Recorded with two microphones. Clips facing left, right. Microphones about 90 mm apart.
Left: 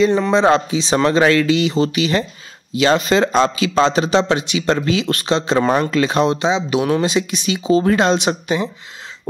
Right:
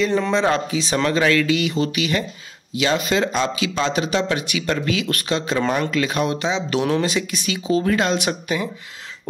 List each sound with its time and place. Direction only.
0.3 s speech: 20° left (ahead or behind)